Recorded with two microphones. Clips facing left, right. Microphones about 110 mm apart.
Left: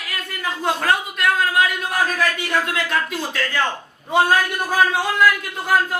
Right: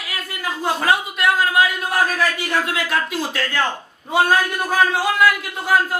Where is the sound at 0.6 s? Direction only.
5° right (ahead or behind).